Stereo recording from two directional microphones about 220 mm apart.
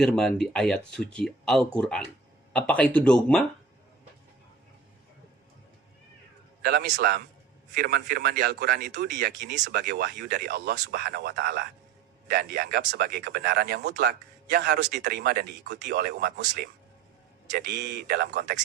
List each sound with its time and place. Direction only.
0.0 s speech: 5° left (ahead or behind)
6.7 s speech: 50° right (ahead or behind)
17.7 s speech: 45° right (ahead or behind)